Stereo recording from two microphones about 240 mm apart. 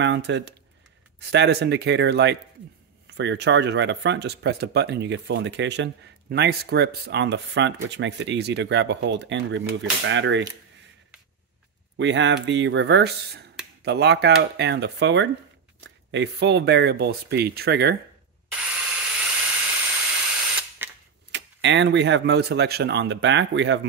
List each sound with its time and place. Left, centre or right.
0.0 s speech: right
12.0 s speech: right
19.9 s ratchet: centre
21.3 s speech: right